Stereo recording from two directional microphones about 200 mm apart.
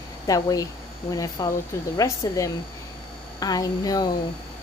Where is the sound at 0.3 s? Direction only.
15° left (ahead or behind).